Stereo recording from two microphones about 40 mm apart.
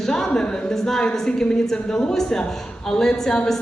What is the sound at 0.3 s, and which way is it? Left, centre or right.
Speech, left.